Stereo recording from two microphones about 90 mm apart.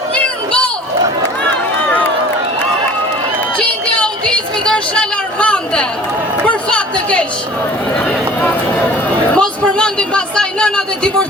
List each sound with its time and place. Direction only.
1.9 s run: 15° left (ahead or behind)
3.7 s a sound: 10° left (ahead or behind)
6.4 s a woman's voice: 15° left (ahead or behind)